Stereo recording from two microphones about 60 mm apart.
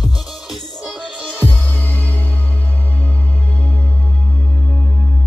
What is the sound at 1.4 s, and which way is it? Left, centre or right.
Music, left.